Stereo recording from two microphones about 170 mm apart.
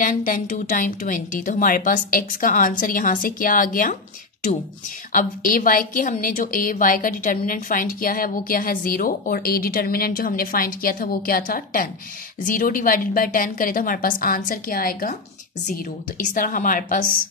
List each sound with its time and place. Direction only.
0.0 s speech: 55° left (ahead or behind)
5.1 s a woman's voice: 50° left (ahead or behind)